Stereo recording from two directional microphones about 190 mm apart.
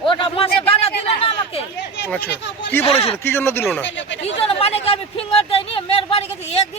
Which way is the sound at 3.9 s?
70° left (ahead or behind).